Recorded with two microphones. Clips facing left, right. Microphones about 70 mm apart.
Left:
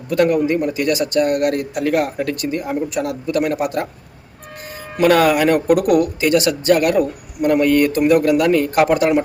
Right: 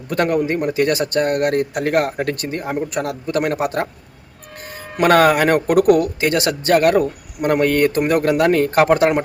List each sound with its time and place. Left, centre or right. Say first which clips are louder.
0.1 s a man's voice: left 3 dB; right
4.9 s speech: even; right